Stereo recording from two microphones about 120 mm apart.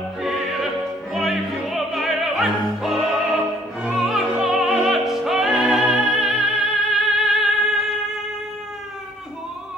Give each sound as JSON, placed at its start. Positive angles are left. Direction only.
{"t": 0.2, "sound": "music", "side_deg": 0}
{"t": 1.1, "sound": "opera", "side_deg": 0}